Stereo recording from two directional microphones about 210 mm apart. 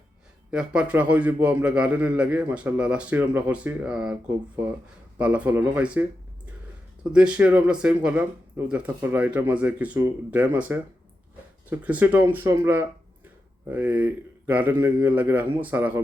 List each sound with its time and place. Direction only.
0.5 s a man's voice: 5° right (ahead or behind)